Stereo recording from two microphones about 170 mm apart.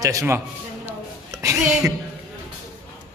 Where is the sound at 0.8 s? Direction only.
15° right (ahead or behind).